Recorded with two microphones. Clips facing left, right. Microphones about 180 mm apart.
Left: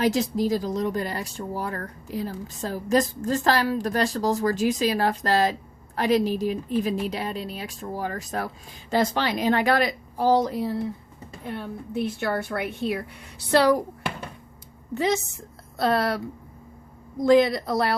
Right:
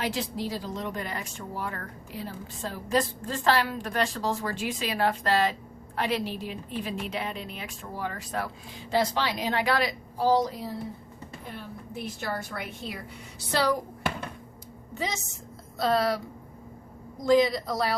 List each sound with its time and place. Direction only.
0.0 s a woman's voice: 45° left (ahead or behind); by 13.7 s 60° left (ahead or behind)
14.9 s speech: 60° left (ahead or behind)